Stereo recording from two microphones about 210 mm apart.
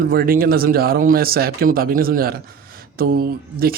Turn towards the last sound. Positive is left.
turn(degrees=-45)  # may be behind; listen again after turning